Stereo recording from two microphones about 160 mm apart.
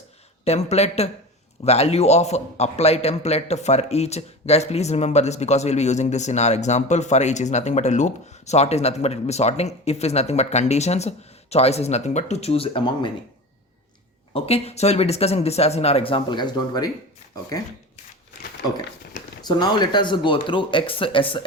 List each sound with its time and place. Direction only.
0.4 s a man's voice: 40° left (ahead or behind)
14.3 s speech: 40° left (ahead or behind)
19.4 s speech: 25° left (ahead or behind)